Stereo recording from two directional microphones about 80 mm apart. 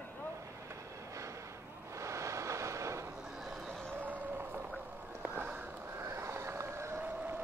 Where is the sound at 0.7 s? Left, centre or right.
Right.